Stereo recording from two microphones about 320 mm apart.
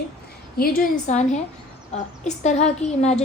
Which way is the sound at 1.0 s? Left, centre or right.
Left.